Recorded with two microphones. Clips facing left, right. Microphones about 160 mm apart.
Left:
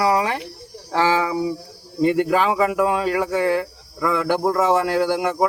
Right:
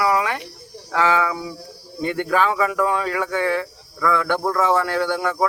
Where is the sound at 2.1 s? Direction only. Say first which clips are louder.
Right 2 dB; 15° left (ahead or behind).